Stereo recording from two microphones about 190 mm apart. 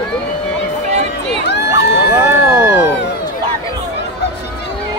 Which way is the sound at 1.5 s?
65° left (ahead or behind).